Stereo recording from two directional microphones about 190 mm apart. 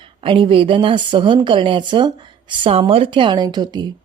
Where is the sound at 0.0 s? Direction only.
25° right (ahead or behind).